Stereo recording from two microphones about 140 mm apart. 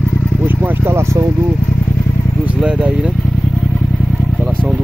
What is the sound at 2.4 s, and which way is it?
Vehicle, 10° right (ahead or behind).